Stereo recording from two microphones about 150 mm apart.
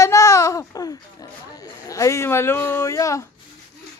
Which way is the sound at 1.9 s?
20° left (ahead or behind).